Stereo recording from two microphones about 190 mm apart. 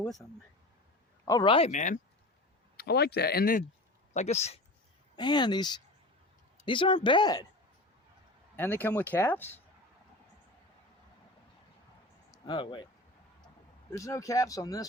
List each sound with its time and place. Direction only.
0.0 s speech: centre (ahead or behind)
1.2 s speech: 20° left (ahead or behind); by 2.0 s 40° left (ahead or behind)
2.7 s speech: 60° left (ahead or behind)
4.1 s speech: 35° left (ahead or behind)
5.1 s speech: 20° left (ahead or behind)
8.5 s speech: 10° left (ahead or behind)
12.5 s speech: 25° left (ahead or behind)
13.9 s speech: 15° left (ahead or behind)